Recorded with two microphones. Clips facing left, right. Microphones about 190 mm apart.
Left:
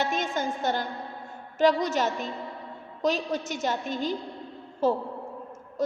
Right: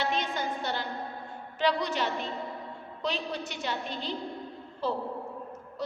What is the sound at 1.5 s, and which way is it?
A woman's voice, 45° left (ahead or behind).